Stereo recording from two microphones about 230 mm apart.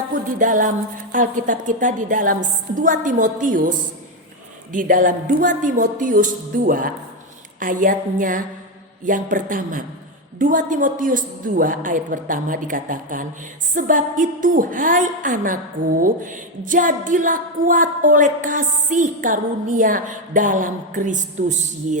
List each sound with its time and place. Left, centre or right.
0.3 s a woman's voice: right